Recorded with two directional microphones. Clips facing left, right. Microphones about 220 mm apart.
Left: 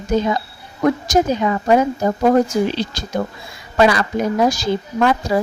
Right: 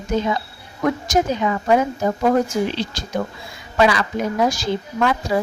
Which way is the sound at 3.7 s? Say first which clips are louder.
Left 3 dB; 40° left (ahead or behind).